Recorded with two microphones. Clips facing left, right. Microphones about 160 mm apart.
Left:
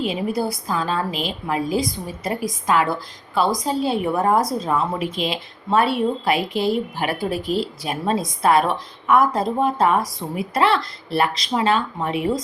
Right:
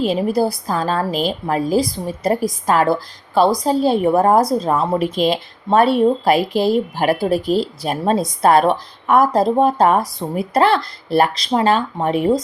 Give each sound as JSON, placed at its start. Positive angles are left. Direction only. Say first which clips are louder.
{"t": 0.0, "sound": "a woman's voice", "louder": "right 6 dB", "side_deg": -40}